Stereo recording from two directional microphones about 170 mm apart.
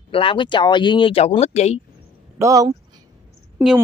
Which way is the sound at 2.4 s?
20° right (ahead or behind).